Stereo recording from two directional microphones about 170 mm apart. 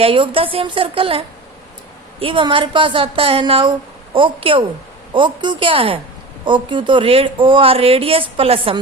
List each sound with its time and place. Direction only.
0.0 s a woman's voice: 30° right (ahead or behind)